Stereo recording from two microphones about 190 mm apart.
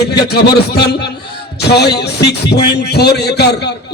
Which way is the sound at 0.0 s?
60° left (ahead or behind).